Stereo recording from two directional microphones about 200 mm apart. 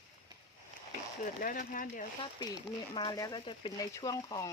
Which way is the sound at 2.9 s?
20° left (ahead or behind).